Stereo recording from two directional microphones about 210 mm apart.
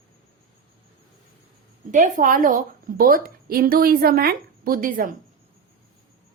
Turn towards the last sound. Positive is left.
turn(degrees=-40)  # may be behind; listen again after turning